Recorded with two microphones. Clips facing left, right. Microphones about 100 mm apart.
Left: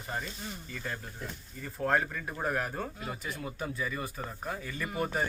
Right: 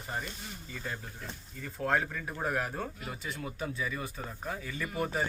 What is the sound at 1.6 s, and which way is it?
Speech, 5° left (ahead or behind).